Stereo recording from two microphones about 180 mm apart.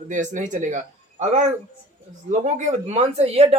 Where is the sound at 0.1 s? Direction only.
45° right (ahead or behind).